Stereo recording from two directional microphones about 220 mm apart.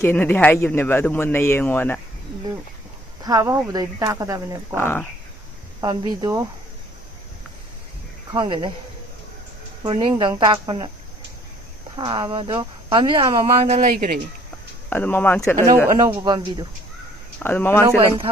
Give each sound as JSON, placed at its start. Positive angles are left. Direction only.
{"t": 0.0, "sound": "speech", "side_deg": 10}
{"t": 3.2, "sound": "speech", "side_deg": -15}
{"t": 4.8, "sound": "speech", "side_deg": 10}
{"t": 5.8, "sound": "speech", "side_deg": -20}
{"t": 8.3, "sound": "speech", "side_deg": -20}
{"t": 9.8, "sound": "speech", "side_deg": -20}
{"t": 11.9, "sound": "speech", "side_deg": -20}
{"t": 13.9, "sound": "speech", "side_deg": -40}
{"t": 14.8, "sound": "speech", "side_deg": 10}
{"t": 16.0, "sound": "speech", "side_deg": -15}
{"t": 17.4, "sound": "speech", "side_deg": 10}